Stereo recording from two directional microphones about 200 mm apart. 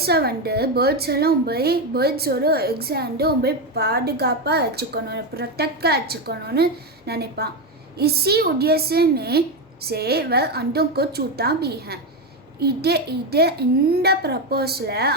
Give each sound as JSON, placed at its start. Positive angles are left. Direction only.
{"t": 0.0, "sound": "a woman's voice", "side_deg": -50}